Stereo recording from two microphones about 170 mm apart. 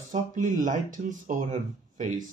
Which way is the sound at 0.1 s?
50° right (ahead or behind).